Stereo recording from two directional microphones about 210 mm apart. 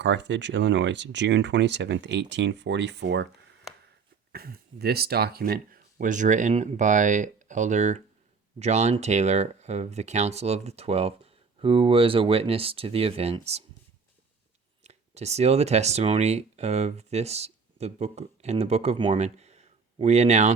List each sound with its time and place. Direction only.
0.0 s speech: 55° right (ahead or behind)
4.3 s speech: 45° right (ahead or behind); by 13.7 s 30° right (ahead or behind)
14.8 s speech: 30° right (ahead or behind)